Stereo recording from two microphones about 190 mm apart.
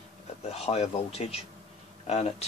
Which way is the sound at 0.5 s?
35° left (ahead or behind).